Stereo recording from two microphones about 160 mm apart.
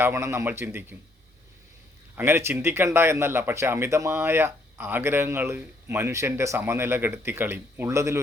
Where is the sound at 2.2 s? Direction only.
15° right (ahead or behind).